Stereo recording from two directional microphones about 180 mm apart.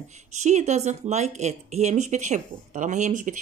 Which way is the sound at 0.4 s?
40° right (ahead or behind).